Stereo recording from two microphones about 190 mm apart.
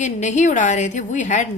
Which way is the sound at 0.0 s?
40° left (ahead or behind).